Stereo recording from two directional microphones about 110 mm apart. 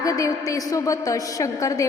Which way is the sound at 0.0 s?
30° left (ahead or behind).